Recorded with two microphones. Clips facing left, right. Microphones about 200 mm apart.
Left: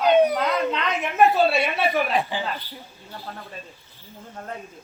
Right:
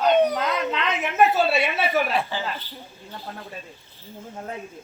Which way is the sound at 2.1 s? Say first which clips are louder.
Left 1 dB; 15° left (ahead or behind).